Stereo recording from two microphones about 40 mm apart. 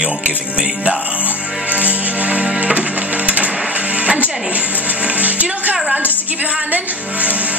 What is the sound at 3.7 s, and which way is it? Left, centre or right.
Speech, right.